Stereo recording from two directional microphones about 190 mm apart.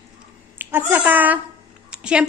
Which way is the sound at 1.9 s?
5° right (ahead or behind).